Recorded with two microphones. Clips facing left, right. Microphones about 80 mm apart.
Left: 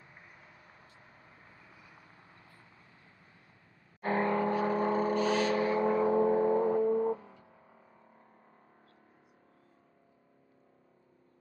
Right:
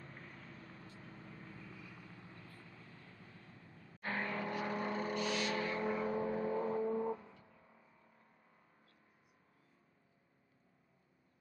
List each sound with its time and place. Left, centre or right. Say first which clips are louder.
0.0 s vehicle: right 2 dB; centre
4.0 s vehicle: left 11 dB; left
7.0 s a sound: left 8 dB; left